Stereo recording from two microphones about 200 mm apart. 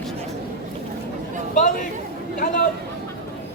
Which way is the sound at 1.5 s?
40° left (ahead or behind).